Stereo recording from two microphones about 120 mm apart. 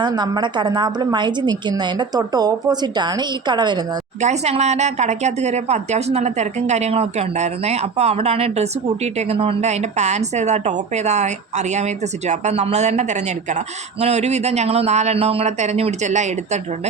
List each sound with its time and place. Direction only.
0.0 s a woman's voice: 35° right (ahead or behind)
4.2 s speech: 70° right (ahead or behind)
14.0 s speech: 65° right (ahead or behind)